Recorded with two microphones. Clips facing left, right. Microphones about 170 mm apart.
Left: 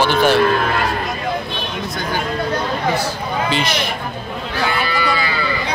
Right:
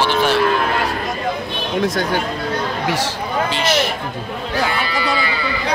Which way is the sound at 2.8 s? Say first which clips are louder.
Left 1 dB; 90° right.